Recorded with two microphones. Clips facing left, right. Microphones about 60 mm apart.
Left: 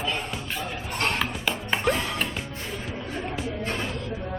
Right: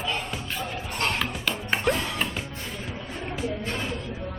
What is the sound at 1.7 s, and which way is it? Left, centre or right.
Music, centre.